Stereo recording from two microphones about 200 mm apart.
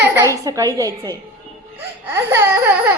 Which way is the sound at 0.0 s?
15° right (ahead or behind).